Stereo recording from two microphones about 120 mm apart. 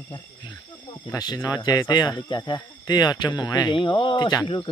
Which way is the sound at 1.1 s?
35° left (ahead or behind).